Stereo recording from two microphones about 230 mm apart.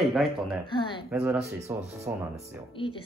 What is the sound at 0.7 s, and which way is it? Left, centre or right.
Speech, left.